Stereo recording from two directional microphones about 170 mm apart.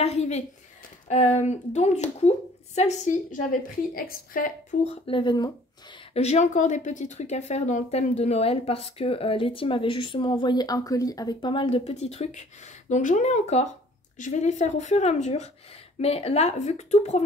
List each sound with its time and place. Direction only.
0.0 s a woman's voice: 40° left (ahead or behind)
3.9 s a woman's voice: 55° left (ahead or behind)
4.8 s speech: 30° left (ahead or behind)
6.1 s a woman's voice: 40° left (ahead or behind)